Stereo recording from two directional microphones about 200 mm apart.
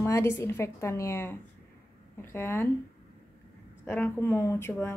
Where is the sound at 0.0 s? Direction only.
15° left (ahead or behind).